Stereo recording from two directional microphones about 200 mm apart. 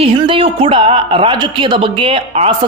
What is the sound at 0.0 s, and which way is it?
A woman's voice, 25° right (ahead or behind).